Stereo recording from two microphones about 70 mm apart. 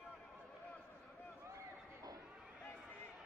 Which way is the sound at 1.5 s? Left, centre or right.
Right.